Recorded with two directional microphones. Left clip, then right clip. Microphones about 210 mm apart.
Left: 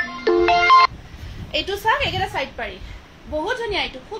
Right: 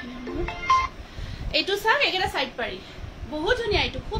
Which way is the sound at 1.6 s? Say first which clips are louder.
Left 1 dB; 15° right (ahead or behind).